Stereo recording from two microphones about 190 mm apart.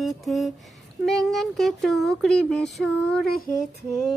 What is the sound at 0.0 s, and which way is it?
Speech, centre (ahead or behind).